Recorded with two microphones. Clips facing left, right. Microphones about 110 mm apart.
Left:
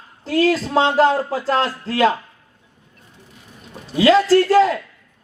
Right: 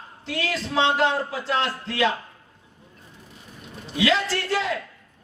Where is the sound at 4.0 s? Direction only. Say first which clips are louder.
Left 10 dB; 40° left (ahead or behind).